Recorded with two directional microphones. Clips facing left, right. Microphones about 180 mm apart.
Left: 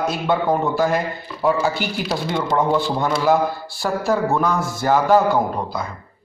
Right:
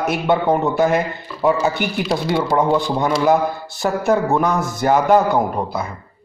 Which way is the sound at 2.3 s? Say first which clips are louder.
Right 2 dB; 10° right (ahead or behind).